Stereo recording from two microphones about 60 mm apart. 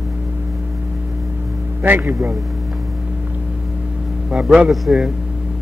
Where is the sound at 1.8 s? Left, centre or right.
Right.